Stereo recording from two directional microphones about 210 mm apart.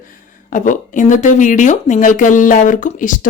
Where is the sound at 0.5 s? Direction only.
35° left (ahead or behind).